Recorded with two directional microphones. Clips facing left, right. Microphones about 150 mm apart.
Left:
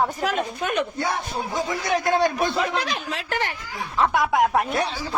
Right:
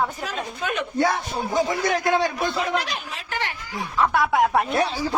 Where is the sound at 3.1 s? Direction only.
90° left.